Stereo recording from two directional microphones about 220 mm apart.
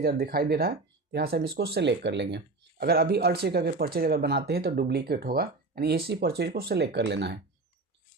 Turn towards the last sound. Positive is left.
turn(degrees=-50)  # may be behind; listen again after turning